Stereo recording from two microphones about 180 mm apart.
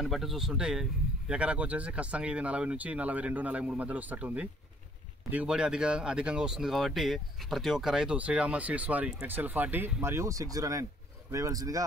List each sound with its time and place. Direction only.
0.0 s speech: centre (ahead or behind); by 11.8 s 20° right (ahead or behind)